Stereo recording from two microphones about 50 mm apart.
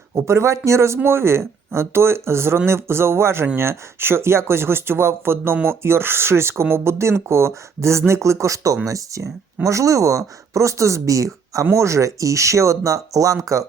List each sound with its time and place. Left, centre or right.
0.2 s speech: right
1.0 s speech: right
11.6 s speech: right